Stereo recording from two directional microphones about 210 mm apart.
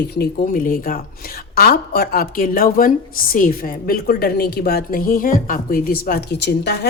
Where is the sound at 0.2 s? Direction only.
40° left (ahead or behind).